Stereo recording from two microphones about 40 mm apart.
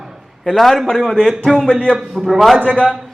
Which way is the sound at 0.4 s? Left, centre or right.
Centre.